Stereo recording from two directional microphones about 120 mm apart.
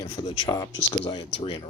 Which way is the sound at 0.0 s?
40° left (ahead or behind).